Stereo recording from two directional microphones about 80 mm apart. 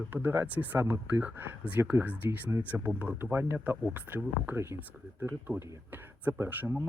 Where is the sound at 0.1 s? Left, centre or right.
Right.